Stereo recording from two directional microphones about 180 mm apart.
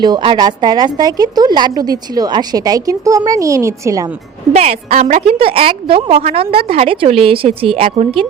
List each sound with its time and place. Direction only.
0.0 s a woman's voice: 25° right (ahead or behind)
4.5 s a woman's voice: 35° right (ahead or behind)